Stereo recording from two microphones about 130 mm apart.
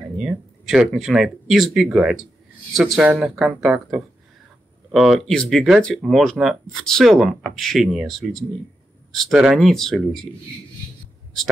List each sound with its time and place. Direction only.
0.2 s speech: 5° right (ahead or behind)